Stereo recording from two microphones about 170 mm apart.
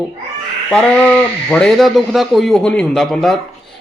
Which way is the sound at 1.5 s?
5° left (ahead or behind).